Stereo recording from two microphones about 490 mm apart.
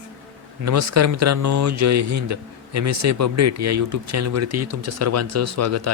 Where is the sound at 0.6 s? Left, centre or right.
Right.